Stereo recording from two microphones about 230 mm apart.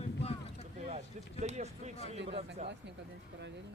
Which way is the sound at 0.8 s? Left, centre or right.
Right.